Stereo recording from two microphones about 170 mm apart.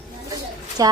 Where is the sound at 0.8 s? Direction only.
20° right (ahead or behind).